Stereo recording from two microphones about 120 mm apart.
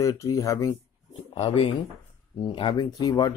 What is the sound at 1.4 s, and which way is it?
Speech, 55° left (ahead or behind).